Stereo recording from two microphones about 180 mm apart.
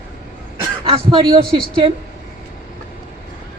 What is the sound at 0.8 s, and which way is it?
A man's voice, 30° right (ahead or behind).